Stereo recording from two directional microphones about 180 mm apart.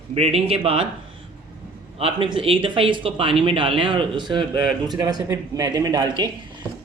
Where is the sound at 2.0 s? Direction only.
30° right (ahead or behind).